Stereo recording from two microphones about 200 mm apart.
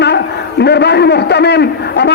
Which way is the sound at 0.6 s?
55° left (ahead or behind).